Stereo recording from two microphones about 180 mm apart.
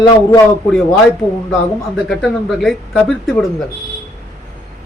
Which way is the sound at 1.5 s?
Centre (ahead or behind).